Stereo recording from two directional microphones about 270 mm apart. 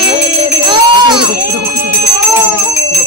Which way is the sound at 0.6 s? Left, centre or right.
Centre.